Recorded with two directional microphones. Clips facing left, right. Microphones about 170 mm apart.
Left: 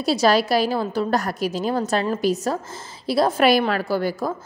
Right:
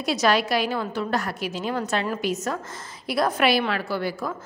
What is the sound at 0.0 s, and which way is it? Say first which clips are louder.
A woman's voice: left 4 dB; 30° left (ahead or behind).